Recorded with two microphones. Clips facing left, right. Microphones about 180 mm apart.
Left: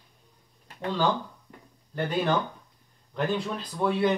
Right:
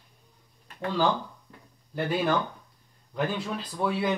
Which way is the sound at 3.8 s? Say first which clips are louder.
Left 2 dB; 10° right (ahead or behind).